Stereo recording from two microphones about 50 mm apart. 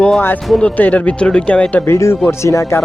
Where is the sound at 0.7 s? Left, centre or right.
Left.